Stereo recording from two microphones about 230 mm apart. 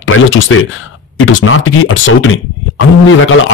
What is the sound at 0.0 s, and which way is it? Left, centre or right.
Speech, left.